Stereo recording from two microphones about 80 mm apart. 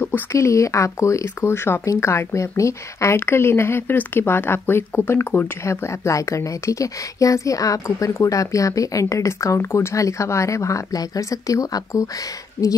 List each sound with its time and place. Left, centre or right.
0.3 s speech: left
5.6 s a woman's voice: left